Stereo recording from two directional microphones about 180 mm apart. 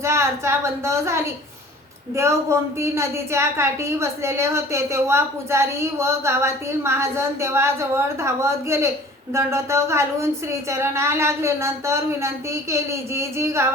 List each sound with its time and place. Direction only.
0.0 s a woman's voice: 15° right (ahead or behind)